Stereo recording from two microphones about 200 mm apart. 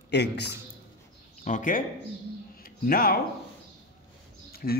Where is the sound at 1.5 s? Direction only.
40° left (ahead or behind).